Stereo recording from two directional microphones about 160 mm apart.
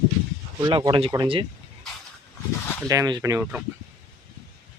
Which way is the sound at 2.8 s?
20° right (ahead or behind).